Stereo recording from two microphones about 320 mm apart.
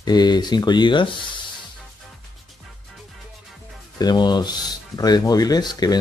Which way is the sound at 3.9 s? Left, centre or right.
Centre.